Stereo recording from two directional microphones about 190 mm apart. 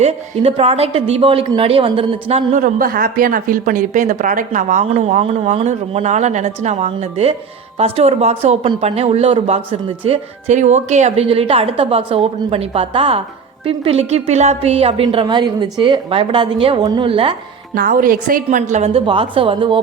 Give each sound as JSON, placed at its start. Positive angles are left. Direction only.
{"t": 0.0, "sound": "speech", "side_deg": -30}
{"t": 2.6, "sound": "a woman's voice", "side_deg": -50}
{"t": 17.7, "sound": "speech", "side_deg": -50}